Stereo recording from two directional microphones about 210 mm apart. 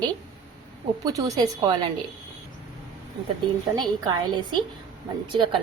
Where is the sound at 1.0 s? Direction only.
15° right (ahead or behind).